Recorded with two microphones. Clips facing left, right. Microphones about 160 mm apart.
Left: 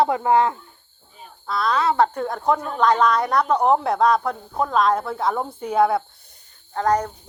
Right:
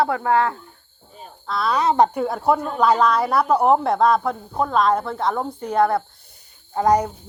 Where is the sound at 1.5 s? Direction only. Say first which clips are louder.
Even; centre (ahead or behind).